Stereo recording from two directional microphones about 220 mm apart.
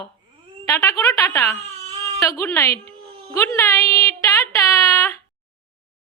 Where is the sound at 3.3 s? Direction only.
10° left (ahead or behind).